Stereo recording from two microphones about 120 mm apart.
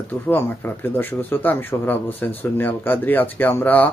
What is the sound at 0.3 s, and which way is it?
Speech, 20° left (ahead or behind).